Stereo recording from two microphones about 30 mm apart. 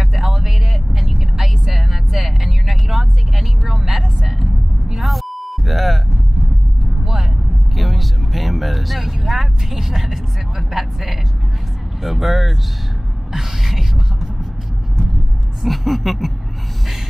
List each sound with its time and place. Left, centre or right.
0.0 s vehicle: centre
7.0 s vehicle: centre
7.7 s vehicle: centre
13.3 s music: centre
15.6 s a sound: centre